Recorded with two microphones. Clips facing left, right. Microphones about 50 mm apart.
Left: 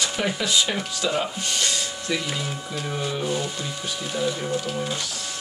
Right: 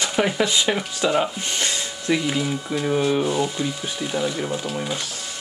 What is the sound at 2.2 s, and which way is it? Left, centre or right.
Speech, centre.